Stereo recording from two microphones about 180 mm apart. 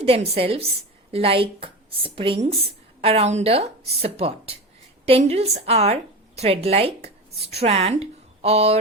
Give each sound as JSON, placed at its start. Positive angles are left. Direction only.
{"t": 0.0, "sound": "a woman's voice", "side_deg": -35}